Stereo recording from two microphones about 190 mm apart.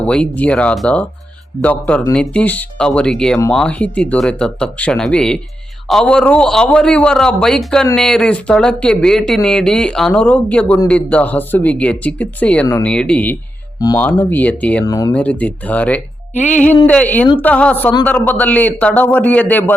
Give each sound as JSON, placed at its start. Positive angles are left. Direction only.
{"t": 0.0, "sound": "speech", "side_deg": 5}
{"t": 13.7, "sound": "speech", "side_deg": 20}
{"t": 14.8, "sound": "speech", "side_deg": 20}
{"t": 15.1, "sound": "speech", "side_deg": 5}